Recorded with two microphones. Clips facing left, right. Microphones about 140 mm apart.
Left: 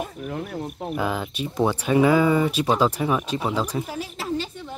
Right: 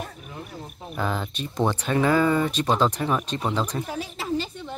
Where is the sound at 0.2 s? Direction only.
65° left (ahead or behind).